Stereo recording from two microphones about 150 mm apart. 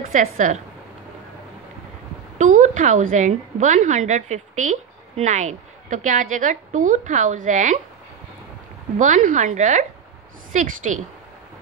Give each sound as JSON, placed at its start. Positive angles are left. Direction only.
{"t": 0.0, "sound": "a woman's voice", "side_deg": -65}
{"t": 2.3, "sound": "a woman's voice", "side_deg": -55}
{"t": 8.9, "sound": "a woman's voice", "side_deg": -55}